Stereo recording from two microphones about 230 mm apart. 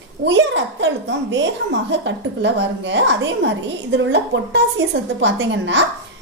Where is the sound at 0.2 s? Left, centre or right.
Right.